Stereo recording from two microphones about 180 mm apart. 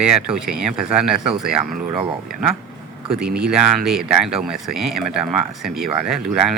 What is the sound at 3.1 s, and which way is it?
Speech, 5° right (ahead or behind).